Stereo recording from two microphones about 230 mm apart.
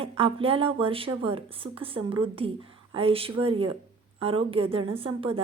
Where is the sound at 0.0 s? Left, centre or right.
Right.